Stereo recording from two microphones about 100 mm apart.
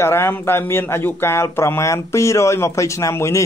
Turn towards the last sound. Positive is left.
turn(degrees=30)  # may be behind; listen again after turning